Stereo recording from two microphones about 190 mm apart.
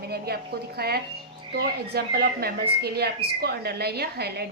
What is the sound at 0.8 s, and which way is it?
A woman's voice, 55° right (ahead or behind).